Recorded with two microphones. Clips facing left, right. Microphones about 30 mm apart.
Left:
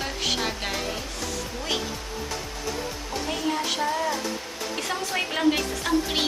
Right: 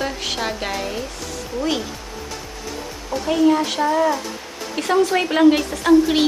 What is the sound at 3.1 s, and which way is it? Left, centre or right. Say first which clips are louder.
A woman's voice: right 12 dB; centre.